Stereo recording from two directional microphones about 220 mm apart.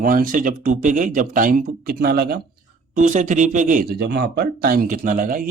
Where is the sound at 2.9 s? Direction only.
35° right (ahead or behind).